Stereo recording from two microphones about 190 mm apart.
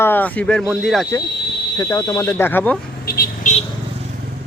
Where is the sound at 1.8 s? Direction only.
15° left (ahead or behind).